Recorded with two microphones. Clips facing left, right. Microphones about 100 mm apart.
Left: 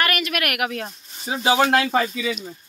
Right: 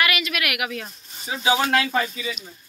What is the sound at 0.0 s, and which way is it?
A man's voice, 45° left (ahead or behind).